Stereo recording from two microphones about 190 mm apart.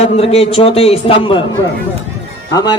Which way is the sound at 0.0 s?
30° left (ahead or behind).